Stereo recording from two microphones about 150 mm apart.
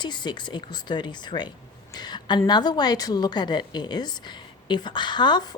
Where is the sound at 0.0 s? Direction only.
30° left (ahead or behind).